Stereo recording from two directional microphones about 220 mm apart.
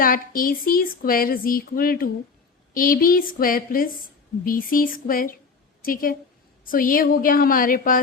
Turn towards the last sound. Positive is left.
turn(degrees=40)  # may be behind; listen again after turning